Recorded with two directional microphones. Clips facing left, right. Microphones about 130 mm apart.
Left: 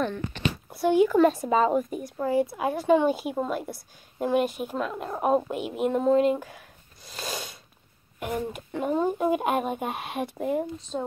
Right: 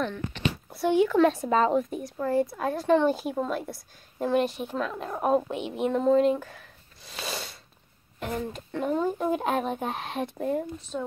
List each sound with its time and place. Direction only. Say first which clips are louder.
0.0 s speech: left 1 dB; 5° left (ahead or behind)
8.2 s speech: left 2 dB; 10° left (ahead or behind)
10.9 s speech: left 2 dB; 30° left (ahead or behind)